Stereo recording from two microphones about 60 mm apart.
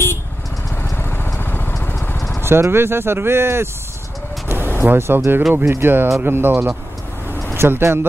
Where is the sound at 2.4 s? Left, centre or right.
Right.